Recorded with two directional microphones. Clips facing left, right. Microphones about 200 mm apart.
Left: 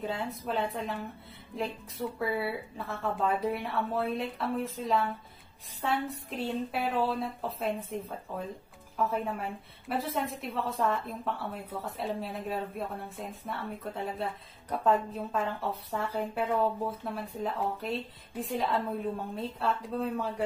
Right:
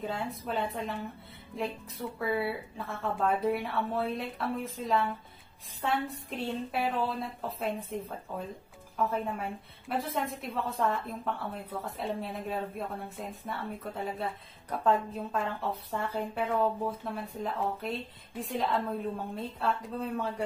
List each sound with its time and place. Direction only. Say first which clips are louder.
0.0 s a woman's voice: left 1 dB; centre (ahead or behind)
8.9 s a woman's voice: even; centre (ahead or behind)